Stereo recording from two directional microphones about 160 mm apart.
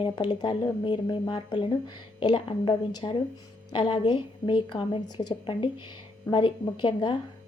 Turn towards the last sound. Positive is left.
turn(degrees=30)  # may be behind; listen again after turning